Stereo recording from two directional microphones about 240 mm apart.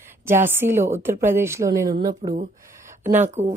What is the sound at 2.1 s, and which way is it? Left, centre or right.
Speech, right.